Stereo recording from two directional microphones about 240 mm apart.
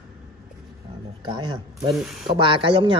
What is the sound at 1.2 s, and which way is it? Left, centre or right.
Speech, centre.